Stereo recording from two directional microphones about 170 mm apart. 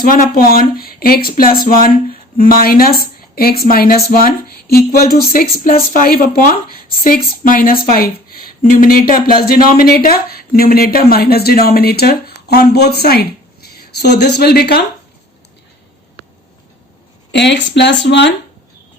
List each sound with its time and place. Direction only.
0.0 s a woman's voice: 55° left (ahead or behind)
17.3 s speech: 90° left